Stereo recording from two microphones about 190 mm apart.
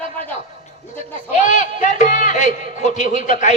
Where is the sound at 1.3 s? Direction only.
40° left (ahead or behind).